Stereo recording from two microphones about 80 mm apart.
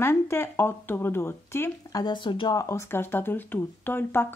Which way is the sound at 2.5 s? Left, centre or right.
Left.